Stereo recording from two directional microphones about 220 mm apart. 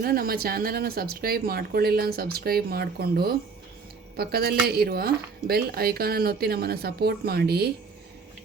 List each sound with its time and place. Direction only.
0.0 s speech: 45° right (ahead or behind)